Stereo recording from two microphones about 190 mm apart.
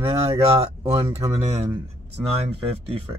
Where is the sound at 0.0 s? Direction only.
25° right (ahead or behind).